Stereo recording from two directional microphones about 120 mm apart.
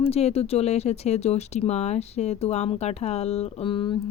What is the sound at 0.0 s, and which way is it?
Speech, 60° left (ahead or behind).